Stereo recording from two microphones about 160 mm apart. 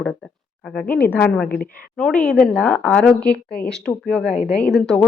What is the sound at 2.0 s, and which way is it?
A woman's voice, 5° left (ahead or behind).